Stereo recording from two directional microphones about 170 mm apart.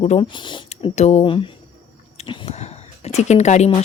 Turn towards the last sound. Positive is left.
turn(degrees=40)  # may be behind; listen again after turning